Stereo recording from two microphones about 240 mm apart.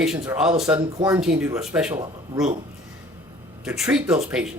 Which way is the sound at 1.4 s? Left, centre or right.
Centre.